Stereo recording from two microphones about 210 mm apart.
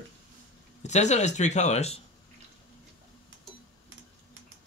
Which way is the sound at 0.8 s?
35° left (ahead or behind).